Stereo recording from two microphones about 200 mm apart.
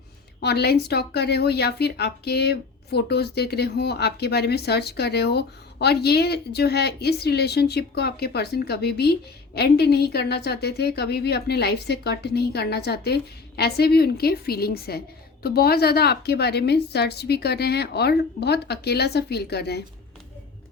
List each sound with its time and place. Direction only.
0.3 s a woman's voice: 55° left (ahead or behind)